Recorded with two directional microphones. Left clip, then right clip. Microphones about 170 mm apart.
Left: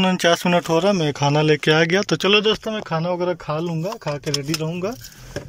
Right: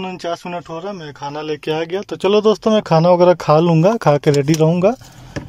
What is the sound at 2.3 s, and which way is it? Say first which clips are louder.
Speech: right 6 dB; 40° right (ahead or behind).